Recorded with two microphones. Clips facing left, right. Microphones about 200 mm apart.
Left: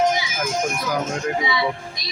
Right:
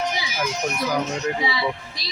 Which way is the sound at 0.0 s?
50° left (ahead or behind).